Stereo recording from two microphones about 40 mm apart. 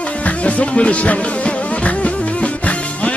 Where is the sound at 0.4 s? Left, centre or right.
Left.